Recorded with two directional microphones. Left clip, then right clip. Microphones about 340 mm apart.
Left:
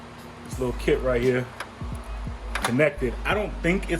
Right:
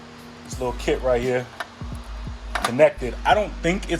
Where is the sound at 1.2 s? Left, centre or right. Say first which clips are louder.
Even; centre.